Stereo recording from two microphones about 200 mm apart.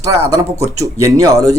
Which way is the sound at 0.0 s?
15° right (ahead or behind).